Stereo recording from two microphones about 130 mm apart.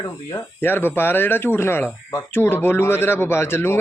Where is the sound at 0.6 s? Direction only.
15° left (ahead or behind).